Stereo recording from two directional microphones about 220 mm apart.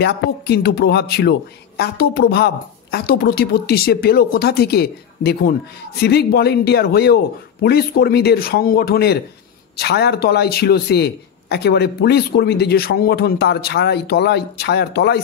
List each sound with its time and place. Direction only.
0.0 s speech: 50° left (ahead or behind)